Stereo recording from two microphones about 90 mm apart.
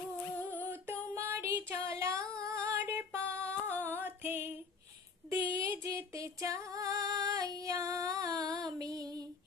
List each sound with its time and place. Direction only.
0.5 s music: 25° right (ahead or behind)
2.4 s female singing: 35° right (ahead or behind)
5.3 s female singing: 35° right (ahead or behind)
8.6 s music: 45° right (ahead or behind)